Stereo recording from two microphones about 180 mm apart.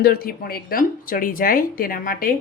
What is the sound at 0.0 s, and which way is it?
Speech, 60° left (ahead or behind).